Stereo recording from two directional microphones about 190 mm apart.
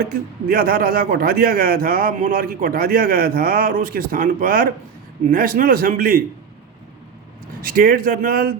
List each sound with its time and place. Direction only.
0.0 s a man's voice: 50° right (ahead or behind)
7.6 s a man's voice: 50° right (ahead or behind)